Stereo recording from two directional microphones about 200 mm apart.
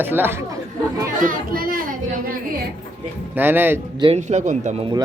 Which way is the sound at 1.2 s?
45° right (ahead or behind).